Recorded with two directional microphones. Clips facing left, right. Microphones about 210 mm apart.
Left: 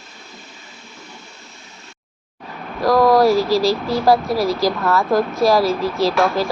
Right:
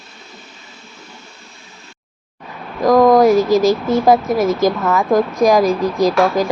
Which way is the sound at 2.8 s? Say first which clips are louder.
Right 3 dB; 20° right (ahead or behind).